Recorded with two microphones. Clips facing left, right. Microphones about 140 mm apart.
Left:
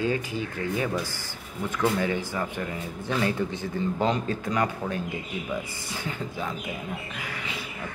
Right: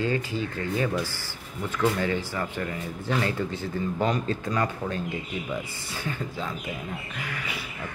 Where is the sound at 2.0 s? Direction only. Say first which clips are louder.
Even; 15° left (ahead or behind).